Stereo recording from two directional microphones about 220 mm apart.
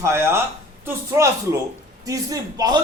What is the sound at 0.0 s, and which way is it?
A man's voice, 10° right (ahead or behind).